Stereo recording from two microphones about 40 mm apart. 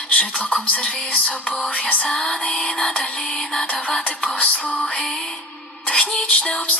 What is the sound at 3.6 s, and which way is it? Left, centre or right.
Music, left.